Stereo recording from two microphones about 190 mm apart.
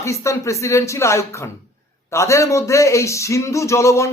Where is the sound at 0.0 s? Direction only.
15° left (ahead or behind).